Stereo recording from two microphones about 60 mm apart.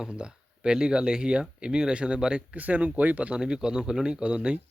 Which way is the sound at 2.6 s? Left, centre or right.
Right.